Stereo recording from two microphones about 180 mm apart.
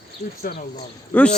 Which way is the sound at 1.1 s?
5° left (ahead or behind).